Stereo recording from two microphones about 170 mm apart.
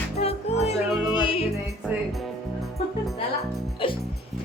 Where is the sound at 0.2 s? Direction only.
40° left (ahead or behind).